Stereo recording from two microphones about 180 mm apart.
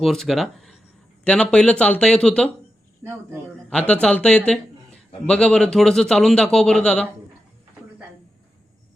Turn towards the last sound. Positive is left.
turn(degrees=5)  # may be behind; listen again after turning